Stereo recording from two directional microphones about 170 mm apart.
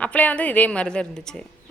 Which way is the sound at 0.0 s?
10° left (ahead or behind).